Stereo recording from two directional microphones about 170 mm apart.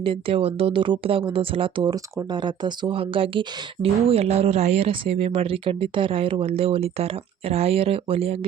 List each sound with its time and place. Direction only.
0.0 s speech: 30° right (ahead or behind)